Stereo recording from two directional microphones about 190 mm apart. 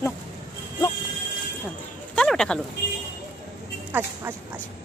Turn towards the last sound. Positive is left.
turn(degrees=-10)  # may be behind; listen again after turning